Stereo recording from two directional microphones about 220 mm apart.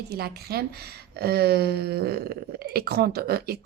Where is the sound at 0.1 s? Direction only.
45° right (ahead or behind).